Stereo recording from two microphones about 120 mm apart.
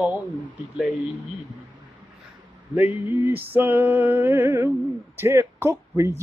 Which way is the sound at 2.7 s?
15° right (ahead or behind).